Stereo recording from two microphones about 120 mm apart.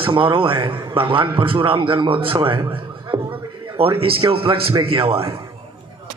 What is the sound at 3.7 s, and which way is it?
A man's voice, 50° right (ahead or behind).